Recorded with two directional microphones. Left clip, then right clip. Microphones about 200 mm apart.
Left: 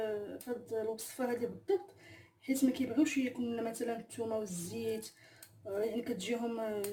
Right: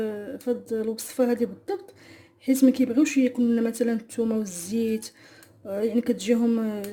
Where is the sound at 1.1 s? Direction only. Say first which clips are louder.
Right 15 dB; 50° right (ahead or behind).